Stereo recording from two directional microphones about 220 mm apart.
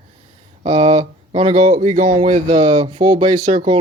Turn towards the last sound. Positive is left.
turn(degrees=-40)  # may be behind; listen again after turning